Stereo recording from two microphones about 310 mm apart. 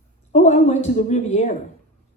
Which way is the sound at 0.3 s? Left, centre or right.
Left.